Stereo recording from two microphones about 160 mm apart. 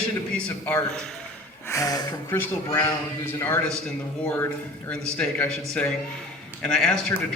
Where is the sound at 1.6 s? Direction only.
20° left (ahead or behind).